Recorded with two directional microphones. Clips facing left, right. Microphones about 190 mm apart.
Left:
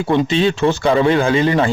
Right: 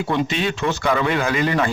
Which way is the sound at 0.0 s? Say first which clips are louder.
Left 6 dB; 30° left (ahead or behind).